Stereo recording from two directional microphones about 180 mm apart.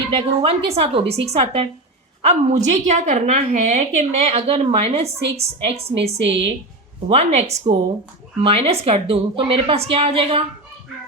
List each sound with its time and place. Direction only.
0.1 s a woman's voice: 35° right (ahead or behind)